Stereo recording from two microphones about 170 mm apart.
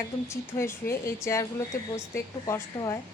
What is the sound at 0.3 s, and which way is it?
A woman's voice, 15° left (ahead or behind).